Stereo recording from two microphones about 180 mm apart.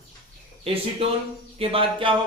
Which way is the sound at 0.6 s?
35° right (ahead or behind).